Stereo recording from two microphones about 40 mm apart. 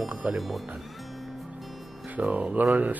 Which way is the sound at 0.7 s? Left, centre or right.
Centre.